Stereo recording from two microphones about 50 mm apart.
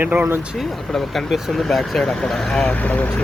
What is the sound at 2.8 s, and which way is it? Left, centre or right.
Speech, left.